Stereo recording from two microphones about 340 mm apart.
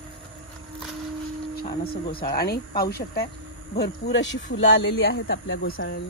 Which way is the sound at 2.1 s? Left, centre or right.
Left.